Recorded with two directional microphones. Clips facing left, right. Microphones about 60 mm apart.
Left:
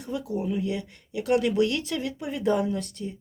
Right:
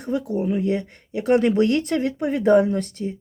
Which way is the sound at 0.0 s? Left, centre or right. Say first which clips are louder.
Right 6 dB; right.